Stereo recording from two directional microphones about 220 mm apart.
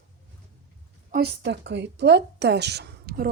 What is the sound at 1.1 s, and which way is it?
Speech, 50° right (ahead or behind).